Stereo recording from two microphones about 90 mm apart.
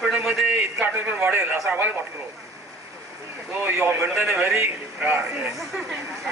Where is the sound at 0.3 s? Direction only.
25° right (ahead or behind).